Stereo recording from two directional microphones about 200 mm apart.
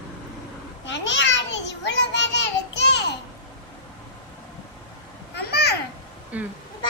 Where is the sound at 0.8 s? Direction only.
65° left (ahead or behind).